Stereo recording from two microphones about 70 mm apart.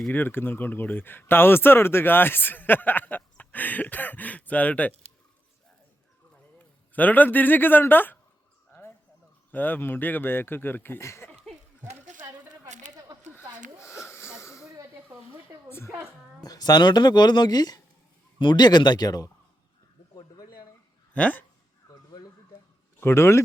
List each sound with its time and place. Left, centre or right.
0.1 s speech: left
6.9 s speech: left
9.5 s speech: left
13.8 s a sound: centre
14.1 s a sound: left
16.4 s speech: left
18.5 s speech: left
20.1 s a sound: left
21.1 s speech: left
23.0 s speech: left